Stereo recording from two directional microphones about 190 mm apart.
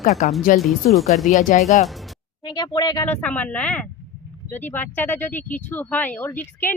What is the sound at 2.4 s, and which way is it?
Speech, 20° left (ahead or behind).